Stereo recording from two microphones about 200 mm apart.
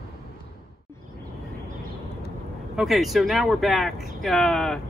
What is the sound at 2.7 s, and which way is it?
Speech, centre (ahead or behind).